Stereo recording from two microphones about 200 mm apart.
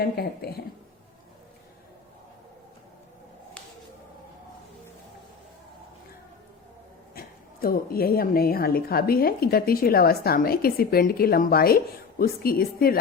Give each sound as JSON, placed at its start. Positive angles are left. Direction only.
{"t": 0.0, "sound": "speech", "side_deg": 50}
{"t": 7.1, "sound": "speech", "side_deg": 45}